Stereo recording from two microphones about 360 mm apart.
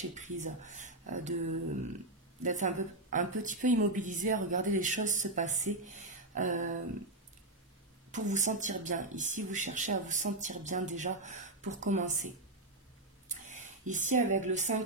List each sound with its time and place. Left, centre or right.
0.1 s speech: centre
2.4 s speech: right
8.1 s speech: centre
13.3 s speech: centre